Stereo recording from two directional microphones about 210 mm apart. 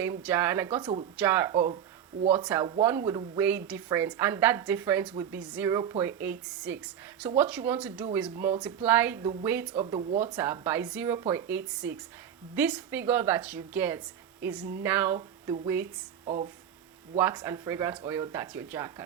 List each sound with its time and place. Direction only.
0.0 s speech: 10° right (ahead or behind)
16.2 s speech: 35° right (ahead or behind)
17.2 s speech: 10° right (ahead or behind)